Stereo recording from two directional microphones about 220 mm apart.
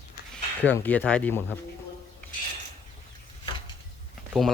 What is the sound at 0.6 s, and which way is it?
Speech, 10° left (ahead or behind).